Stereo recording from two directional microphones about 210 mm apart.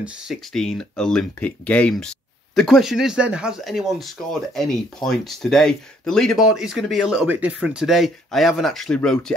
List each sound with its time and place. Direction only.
0.0 s speech: centre (ahead or behind)